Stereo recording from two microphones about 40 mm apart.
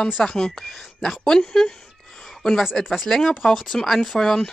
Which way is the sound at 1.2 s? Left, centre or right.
Centre.